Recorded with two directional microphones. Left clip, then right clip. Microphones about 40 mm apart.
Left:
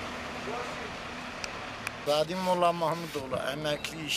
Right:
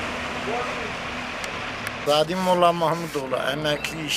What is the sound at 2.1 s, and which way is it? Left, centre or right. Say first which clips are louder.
Speech: right 7 dB; left.